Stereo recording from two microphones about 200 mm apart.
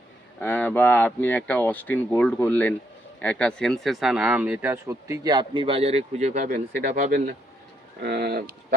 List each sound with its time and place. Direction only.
0.3 s speech: 10° left (ahead or behind); by 8.5 s 50° right (ahead or behind)